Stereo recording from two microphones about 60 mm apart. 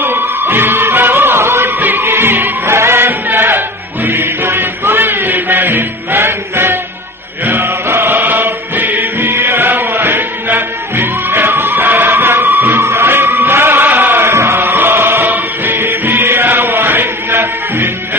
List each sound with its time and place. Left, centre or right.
0.0 s music: right
14.3 s music: right